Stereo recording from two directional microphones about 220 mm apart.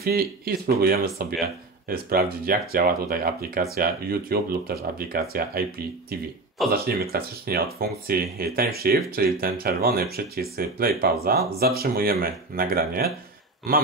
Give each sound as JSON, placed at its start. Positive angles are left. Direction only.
{"t": 0.0, "sound": "speech", "side_deg": -45}
{"t": 6.7, "sound": "speech", "side_deg": -45}